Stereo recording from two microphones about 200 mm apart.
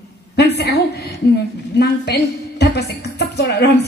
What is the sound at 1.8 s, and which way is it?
A woman's voice, 55° left (ahead or behind).